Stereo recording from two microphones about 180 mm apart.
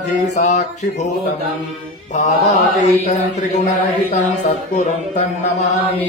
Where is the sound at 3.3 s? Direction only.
40° left (ahead or behind).